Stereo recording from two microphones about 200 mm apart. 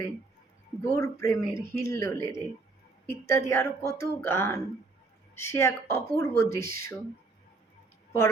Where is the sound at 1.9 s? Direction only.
15° left (ahead or behind).